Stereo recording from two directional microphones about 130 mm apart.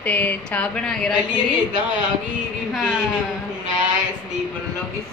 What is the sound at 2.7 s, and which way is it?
Speech, 5° right (ahead or behind).